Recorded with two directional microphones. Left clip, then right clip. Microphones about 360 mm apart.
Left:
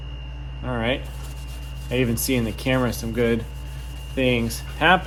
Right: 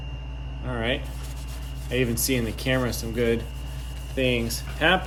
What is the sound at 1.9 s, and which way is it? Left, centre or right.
Speech, centre.